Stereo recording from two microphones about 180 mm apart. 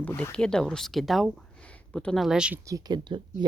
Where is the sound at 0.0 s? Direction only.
10° left (ahead or behind).